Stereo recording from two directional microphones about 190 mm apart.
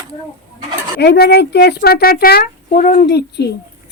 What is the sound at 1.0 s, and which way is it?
Speech, 60° left (ahead or behind).